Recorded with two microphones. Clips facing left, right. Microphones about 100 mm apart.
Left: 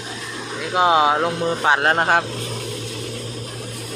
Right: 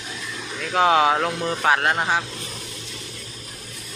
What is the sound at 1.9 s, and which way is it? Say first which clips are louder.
Speech: left 5 dB; 45° left (ahead or behind).